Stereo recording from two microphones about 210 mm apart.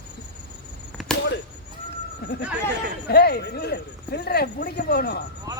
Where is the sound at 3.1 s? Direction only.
50° left (ahead or behind).